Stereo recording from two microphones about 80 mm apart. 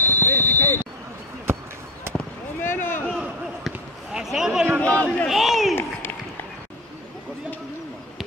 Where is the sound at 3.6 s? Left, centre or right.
Centre.